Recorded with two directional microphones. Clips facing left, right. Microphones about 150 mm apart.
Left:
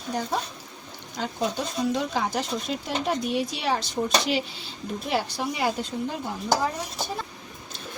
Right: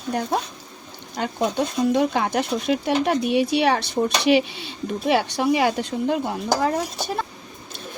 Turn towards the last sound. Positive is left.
turn(degrees=-70)  # may be behind; listen again after turning